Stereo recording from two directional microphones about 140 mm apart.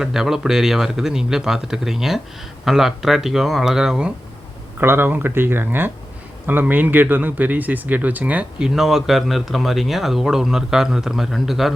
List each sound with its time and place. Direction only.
0.0 s speech: 5° right (ahead or behind)
4.8 s speech: 15° right (ahead or behind)